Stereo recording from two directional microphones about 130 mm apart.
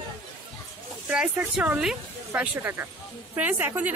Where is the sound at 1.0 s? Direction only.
5° right (ahead or behind).